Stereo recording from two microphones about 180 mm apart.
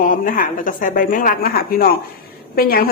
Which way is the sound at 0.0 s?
50° left (ahead or behind).